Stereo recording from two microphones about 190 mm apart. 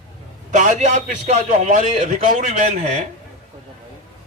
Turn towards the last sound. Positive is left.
turn(degrees=-40)  # may be behind; listen again after turning